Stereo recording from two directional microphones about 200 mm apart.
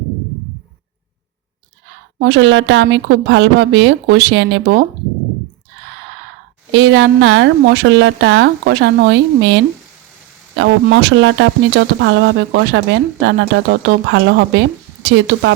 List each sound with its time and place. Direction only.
2.1 s speech: 60° right (ahead or behind)
6.7 s speech: 65° right (ahead or behind)